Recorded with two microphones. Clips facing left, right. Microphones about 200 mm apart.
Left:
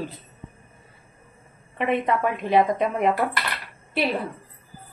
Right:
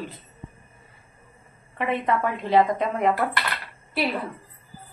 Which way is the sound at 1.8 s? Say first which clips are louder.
Left 2 dB; 20° left (ahead or behind).